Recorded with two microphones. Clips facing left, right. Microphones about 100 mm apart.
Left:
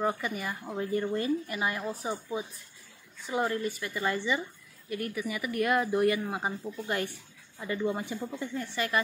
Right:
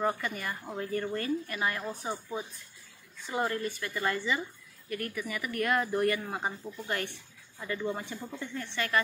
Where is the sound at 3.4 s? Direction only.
15° left (ahead or behind).